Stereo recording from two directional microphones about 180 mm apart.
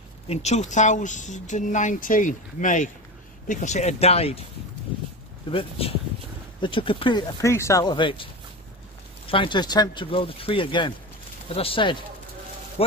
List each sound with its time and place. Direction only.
0.3 s speech: 40° left (ahead or behind)
5.5 s speech: 30° left (ahead or behind)
9.3 s speech: 25° left (ahead or behind)